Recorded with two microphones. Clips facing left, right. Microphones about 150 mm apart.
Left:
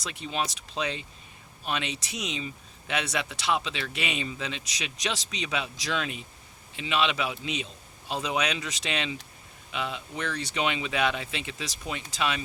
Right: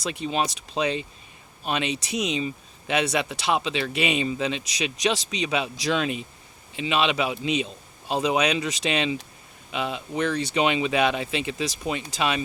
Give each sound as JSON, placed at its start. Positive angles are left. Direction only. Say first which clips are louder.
{"t": 0.1, "sound": "a man's voice", "louder": "right 5 dB", "side_deg": -20}